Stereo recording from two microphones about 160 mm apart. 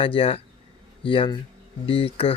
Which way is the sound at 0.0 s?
35° left (ahead or behind).